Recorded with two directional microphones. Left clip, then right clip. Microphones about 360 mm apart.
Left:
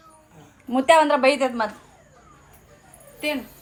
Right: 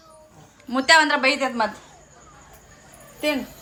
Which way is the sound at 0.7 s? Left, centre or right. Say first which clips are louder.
Even; centre.